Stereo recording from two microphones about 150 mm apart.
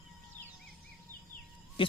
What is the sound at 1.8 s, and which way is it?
Owl, 35° left (ahead or behind).